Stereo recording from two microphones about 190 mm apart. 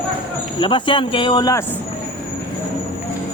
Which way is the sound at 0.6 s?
25° left (ahead or behind).